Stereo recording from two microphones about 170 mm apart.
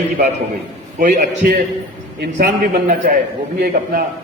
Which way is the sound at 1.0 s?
50° right (ahead or behind).